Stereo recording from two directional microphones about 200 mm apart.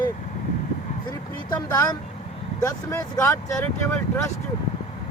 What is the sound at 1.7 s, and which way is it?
Speech, 15° left (ahead or behind).